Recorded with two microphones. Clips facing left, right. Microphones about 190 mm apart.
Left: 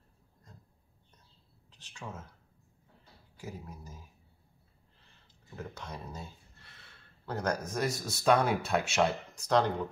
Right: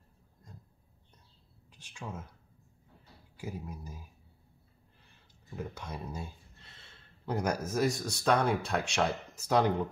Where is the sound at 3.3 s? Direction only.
10° right (ahead or behind).